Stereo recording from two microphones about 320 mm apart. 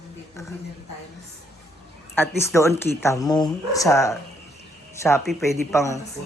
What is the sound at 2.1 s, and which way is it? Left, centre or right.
A man's voice, centre.